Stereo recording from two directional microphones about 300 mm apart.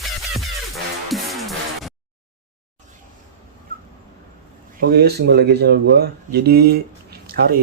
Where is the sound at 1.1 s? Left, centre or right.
Centre.